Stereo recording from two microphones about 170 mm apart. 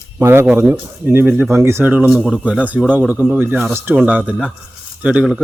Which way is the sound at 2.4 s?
10° right (ahead or behind).